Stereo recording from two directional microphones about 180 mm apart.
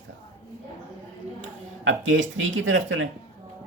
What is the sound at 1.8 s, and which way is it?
Speech, 90° right.